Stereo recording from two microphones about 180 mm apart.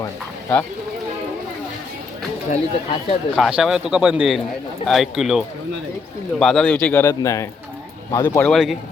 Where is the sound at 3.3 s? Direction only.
Centre (ahead or behind); by 8.5 s 15° left (ahead or behind).